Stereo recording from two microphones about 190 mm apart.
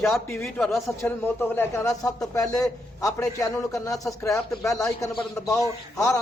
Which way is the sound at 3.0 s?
15° left (ahead or behind).